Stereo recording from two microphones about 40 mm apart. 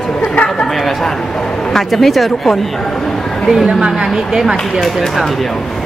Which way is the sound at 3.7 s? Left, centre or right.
Centre.